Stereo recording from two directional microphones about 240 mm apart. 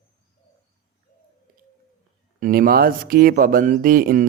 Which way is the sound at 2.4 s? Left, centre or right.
Right.